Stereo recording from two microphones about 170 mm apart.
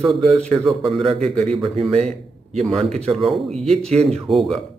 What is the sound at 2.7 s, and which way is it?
Speech, 35° right (ahead or behind).